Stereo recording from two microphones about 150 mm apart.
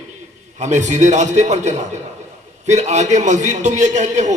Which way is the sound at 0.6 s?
50° right (ahead or behind).